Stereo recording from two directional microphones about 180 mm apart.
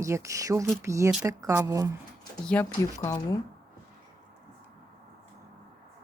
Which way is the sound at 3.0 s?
20° left (ahead or behind).